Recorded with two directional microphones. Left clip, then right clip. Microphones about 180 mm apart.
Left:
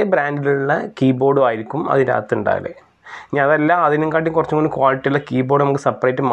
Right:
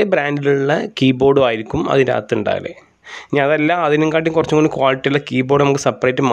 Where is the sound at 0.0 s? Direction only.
30° right (ahead or behind).